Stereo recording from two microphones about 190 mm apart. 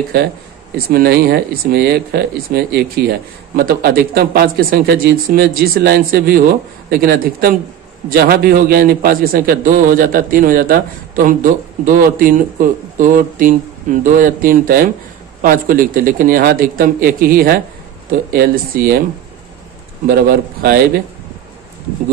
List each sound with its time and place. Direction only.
0.8 s a man's voice: 55° right (ahead or behind)
20.1 s a man's voice: 55° right (ahead or behind)